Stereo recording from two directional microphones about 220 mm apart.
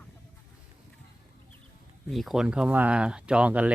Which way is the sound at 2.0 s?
Centre (ahead or behind).